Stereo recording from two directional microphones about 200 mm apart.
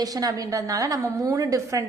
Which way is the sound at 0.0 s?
20° right (ahead or behind).